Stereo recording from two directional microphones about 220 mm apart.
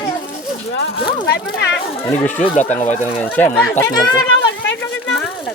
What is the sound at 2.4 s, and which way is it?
Speech, 30° left (ahead or behind).